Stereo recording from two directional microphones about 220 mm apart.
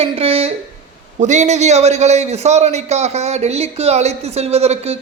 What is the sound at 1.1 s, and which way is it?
A man's voice, 35° right (ahead or behind).